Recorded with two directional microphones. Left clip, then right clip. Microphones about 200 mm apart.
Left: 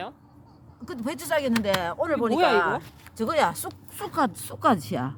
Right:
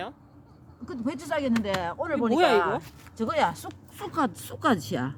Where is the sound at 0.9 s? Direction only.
60° left (ahead or behind).